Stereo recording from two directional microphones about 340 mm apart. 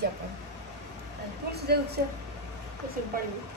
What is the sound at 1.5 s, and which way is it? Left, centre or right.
Speech, right.